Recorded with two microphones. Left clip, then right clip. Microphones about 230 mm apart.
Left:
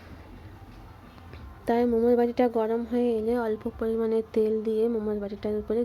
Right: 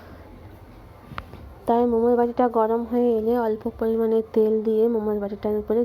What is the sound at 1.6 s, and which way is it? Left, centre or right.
Speech, centre.